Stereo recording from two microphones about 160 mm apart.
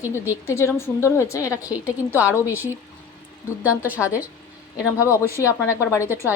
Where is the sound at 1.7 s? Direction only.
10° right (ahead or behind).